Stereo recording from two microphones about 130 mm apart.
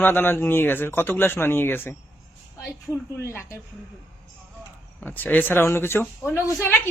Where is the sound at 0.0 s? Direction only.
15° left (ahead or behind).